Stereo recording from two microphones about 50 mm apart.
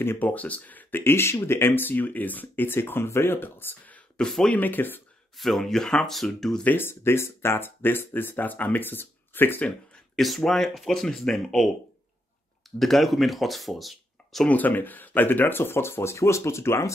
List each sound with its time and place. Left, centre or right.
0.2 s speech: left
1.0 s speech: left
5.4 s speech: centre
6.6 s speech: left
6.9 s speech: left
10.1 s speech: centre
12.7 s speech: centre
14.5 s speech: left